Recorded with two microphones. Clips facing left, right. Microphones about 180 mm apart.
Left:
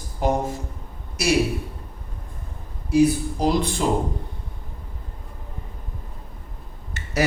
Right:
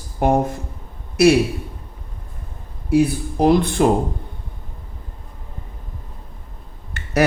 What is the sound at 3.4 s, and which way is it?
Speech, 60° right (ahead or behind).